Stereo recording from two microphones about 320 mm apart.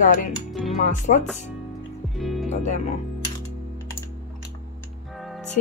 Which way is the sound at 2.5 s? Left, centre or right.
Left.